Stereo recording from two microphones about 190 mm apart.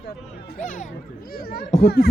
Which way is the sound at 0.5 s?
40° left (ahead or behind).